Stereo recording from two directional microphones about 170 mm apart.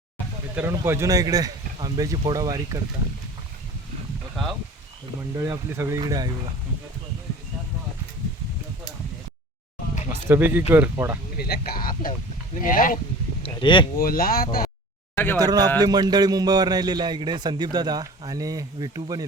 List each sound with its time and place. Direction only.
0.5 s a man's voice: 15° right (ahead or behind)
5.4 s a man's voice: 15° right (ahead or behind)
10.1 s speech: 15° right (ahead or behind)
11.3 s speech: 65° left (ahead or behind)
13.4 s speech: 30° left (ahead or behind)
14.0 s speech: 60° left (ahead or behind)
15.1 s speech: 10° left (ahead or behind)
15.4 s a man's voice: 20° right (ahead or behind)